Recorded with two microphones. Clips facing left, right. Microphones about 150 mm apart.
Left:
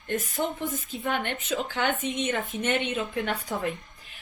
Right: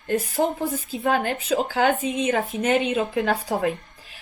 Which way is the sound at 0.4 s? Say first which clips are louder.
Right 6 dB; 35° right (ahead or behind).